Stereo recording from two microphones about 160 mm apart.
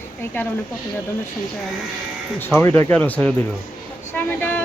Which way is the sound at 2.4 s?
15° left (ahead or behind).